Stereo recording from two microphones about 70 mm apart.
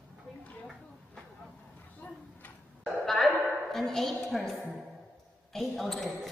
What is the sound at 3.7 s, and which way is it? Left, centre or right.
Speech, centre.